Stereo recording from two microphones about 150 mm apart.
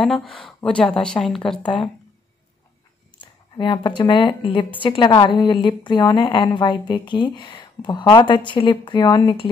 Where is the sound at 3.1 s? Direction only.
30° left (ahead or behind).